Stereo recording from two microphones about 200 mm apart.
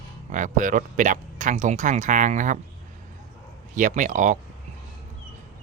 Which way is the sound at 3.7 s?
40° right (ahead or behind).